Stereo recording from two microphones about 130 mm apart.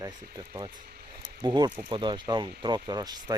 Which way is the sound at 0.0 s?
30° right (ahead or behind).